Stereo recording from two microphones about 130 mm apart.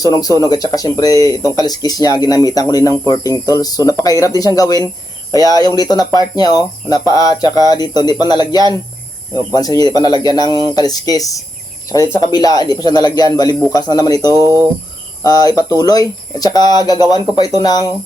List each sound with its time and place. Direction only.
0.0 s speech: 30° left (ahead or behind)